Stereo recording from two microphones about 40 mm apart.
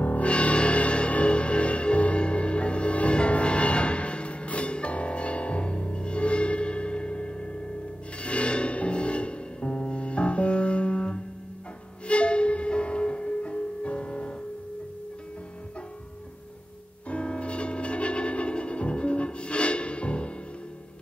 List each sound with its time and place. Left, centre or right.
0.0 s music: left
17.1 s music: left